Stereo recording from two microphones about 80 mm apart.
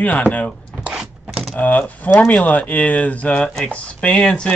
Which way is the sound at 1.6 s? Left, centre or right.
Centre.